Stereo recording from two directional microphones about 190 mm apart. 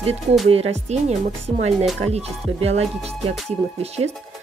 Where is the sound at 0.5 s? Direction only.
35° right (ahead or behind).